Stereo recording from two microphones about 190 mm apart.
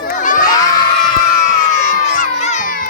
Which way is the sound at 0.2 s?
45° left (ahead or behind).